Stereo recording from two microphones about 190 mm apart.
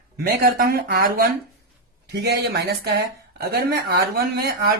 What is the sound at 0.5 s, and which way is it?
Speech, 50° right (ahead or behind).